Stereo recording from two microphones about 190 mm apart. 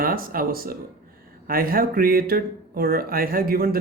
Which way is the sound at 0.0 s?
50° right (ahead or behind).